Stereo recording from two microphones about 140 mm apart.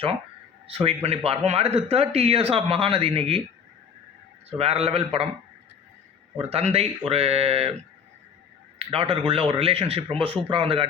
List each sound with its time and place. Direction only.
0.7 s speech: 45° right (ahead or behind)
4.4 s speech: 45° right (ahead or behind)
6.3 s speech: 45° right (ahead or behind)
8.8 s speech: 40° right (ahead or behind)